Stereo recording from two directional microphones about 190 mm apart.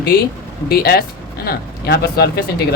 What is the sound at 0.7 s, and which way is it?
Speech, 50° left (ahead or behind).